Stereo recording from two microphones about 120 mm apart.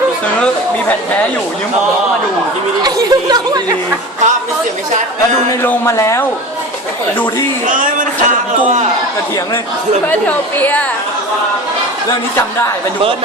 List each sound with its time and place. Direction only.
0.3 s a woman's voice: 10° left (ahead or behind)
2.8 s speech: 35° right (ahead or behind)
5.6 s speech: 20° left (ahead or behind)
7.7 s speech: 90° right
10.1 s a woman's voice: 15° left (ahead or behind)